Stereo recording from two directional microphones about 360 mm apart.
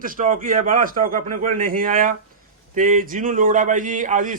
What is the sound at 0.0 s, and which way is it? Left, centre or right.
A man's voice, right.